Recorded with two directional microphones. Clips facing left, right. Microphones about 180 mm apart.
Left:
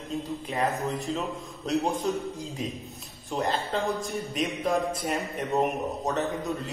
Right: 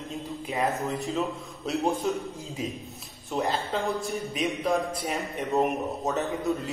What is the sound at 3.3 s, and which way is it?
A man's voice, centre (ahead or behind).